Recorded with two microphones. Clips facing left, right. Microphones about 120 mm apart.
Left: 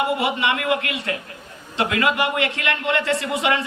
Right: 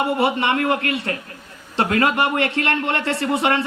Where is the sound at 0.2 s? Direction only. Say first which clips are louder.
Right 3 dB; 35° right (ahead or behind).